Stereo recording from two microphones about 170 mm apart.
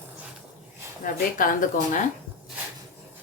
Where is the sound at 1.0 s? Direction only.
55° left (ahead or behind).